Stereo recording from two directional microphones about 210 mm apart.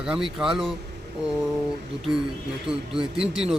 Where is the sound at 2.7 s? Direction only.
5° right (ahead or behind).